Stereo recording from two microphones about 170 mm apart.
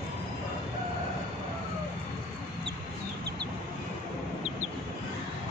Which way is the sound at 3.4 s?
75° right (ahead or behind).